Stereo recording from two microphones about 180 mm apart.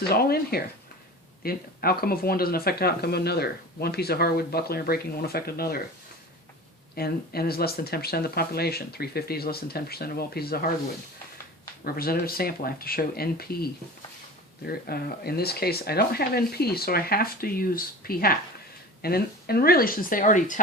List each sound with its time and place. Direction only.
0.1 s speech: 60° left (ahead or behind)
6.9 s speech: 60° left (ahead or behind)
11.8 s speech: 55° left (ahead or behind)
14.7 s speech: 60° left (ahead or behind)